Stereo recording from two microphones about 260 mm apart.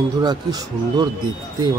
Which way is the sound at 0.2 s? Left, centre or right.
Centre.